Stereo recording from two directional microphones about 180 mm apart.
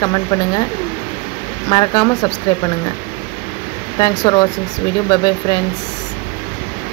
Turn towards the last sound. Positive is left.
turn(degrees=20)  # may be behind; listen again after turning